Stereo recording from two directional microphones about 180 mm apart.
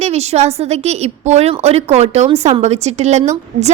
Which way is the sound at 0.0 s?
35° right (ahead or behind).